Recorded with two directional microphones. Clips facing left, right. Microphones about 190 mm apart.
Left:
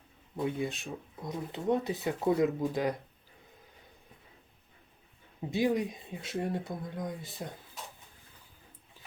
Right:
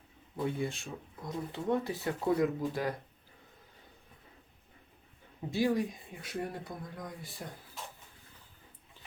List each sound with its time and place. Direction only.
0.4 s speech: 20° left (ahead or behind)
5.5 s speech: 20° left (ahead or behind)